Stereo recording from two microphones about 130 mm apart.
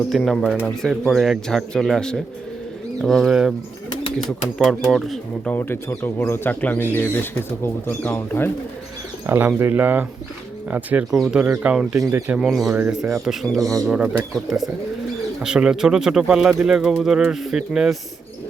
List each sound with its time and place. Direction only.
0.1 s speech: centre (ahead or behind)
4.5 s speech: centre (ahead or behind)
5.5 s speech: 15° left (ahead or behind)
9.2 s speech: 15° right (ahead or behind)